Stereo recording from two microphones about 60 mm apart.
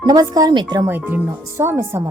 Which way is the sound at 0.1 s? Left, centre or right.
Right.